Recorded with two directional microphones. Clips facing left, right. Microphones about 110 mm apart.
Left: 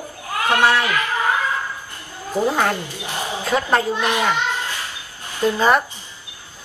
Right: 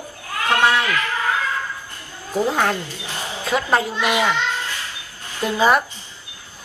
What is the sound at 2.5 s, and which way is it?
A child's voice, 5° left (ahead or behind).